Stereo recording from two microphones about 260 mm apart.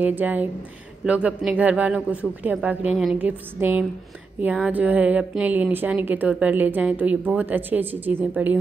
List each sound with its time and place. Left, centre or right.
0.0 s speech: centre